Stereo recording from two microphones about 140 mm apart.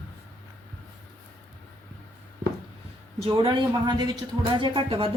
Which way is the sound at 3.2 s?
35° right (ahead or behind).